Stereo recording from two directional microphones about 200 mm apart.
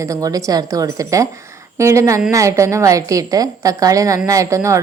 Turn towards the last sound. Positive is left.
turn(degrees=-15)  # may be behind; listen again after turning